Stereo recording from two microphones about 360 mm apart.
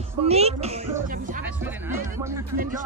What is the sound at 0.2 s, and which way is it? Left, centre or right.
Speech, centre.